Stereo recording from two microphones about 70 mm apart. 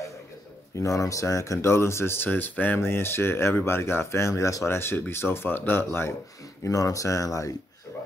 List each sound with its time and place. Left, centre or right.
0.7 s speech: left
6.6 s speech: left